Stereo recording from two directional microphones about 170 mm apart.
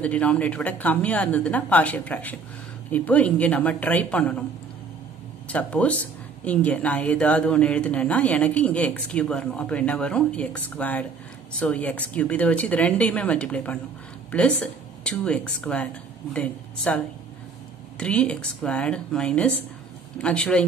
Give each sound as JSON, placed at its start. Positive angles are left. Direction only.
{"t": 0.0, "sound": "speech", "side_deg": 10}
{"t": 5.5, "sound": "a woman's voice", "side_deg": 10}